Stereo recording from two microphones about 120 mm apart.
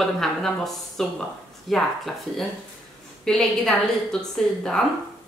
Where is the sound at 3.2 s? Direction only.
5° left (ahead or behind).